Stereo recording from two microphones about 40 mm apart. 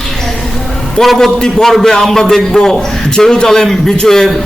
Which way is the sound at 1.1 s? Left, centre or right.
Centre.